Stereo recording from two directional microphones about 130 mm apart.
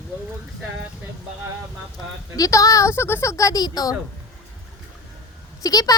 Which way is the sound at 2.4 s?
25° left (ahead or behind).